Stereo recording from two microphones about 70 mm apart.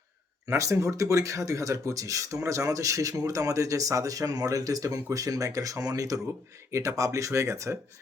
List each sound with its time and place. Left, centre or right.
0.4 s speech: right
6.7 s speech: right